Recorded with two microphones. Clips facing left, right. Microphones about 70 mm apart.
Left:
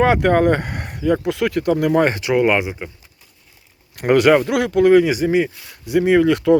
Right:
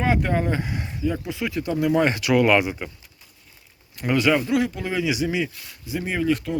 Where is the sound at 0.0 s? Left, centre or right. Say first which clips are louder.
Left 8 dB; left.